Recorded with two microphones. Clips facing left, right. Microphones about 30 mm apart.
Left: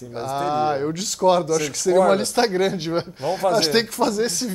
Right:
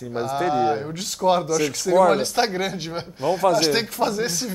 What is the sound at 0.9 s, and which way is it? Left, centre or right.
Speech, centre.